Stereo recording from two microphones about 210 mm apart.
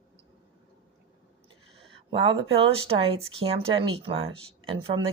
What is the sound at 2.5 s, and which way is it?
Speech, 25° right (ahead or behind).